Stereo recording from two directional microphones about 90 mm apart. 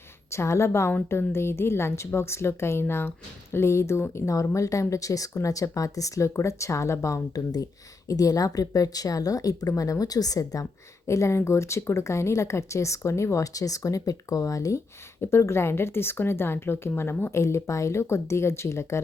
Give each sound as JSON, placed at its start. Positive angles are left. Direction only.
{"t": 0.3, "sound": "a woman's voice", "side_deg": 30}